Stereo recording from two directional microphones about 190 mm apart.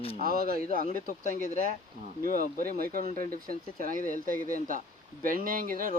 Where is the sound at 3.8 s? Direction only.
45° right (ahead or behind).